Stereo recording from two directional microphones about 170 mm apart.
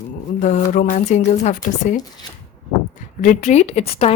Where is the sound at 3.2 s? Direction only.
45° left (ahead or behind).